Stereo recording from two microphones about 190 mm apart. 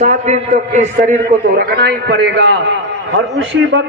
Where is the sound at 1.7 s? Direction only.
60° right (ahead or behind).